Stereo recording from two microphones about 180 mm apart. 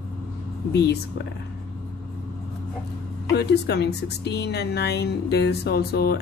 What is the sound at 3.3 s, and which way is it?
Speech, 65° left (ahead or behind).